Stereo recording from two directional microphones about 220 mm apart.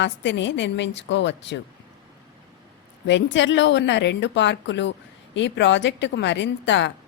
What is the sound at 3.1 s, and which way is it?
A woman's voice, 55° left (ahead or behind).